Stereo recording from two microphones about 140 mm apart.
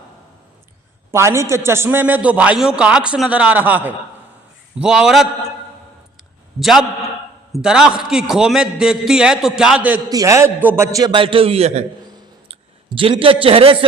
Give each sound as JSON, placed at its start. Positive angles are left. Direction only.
{"t": 1.1, "sound": "a man's voice", "side_deg": -20}
{"t": 6.6, "sound": "a man's voice", "side_deg": 0}
{"t": 10.1, "sound": "a man's voice", "side_deg": -25}
{"t": 10.9, "sound": "a man's voice", "side_deg": -30}